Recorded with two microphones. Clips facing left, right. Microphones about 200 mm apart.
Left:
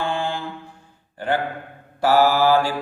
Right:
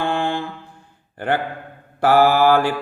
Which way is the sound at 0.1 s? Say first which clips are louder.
Right 3 dB; 55° right (ahead or behind).